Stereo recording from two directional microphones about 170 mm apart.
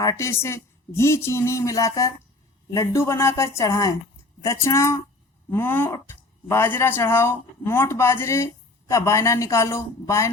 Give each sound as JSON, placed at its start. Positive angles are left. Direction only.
{"t": 0.0, "sound": "speech", "side_deg": 20}